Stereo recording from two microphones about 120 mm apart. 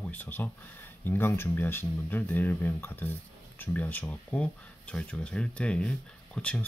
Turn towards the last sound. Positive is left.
turn(degrees=10)  # may be behind; listen again after turning